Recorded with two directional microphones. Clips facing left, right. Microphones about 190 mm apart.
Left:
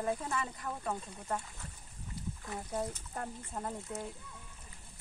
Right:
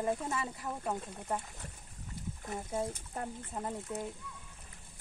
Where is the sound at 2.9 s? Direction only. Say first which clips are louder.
Right 1 dB; 10° right (ahead or behind).